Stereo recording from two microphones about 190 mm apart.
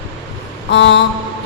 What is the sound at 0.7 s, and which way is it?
Speech, 65° left (ahead or behind).